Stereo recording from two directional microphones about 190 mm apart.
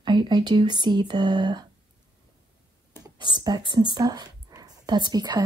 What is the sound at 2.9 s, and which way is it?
A woman's voice, 20° right (ahead or behind).